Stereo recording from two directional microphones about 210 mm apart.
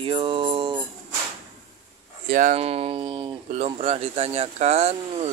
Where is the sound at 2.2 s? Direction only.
35° right (ahead or behind).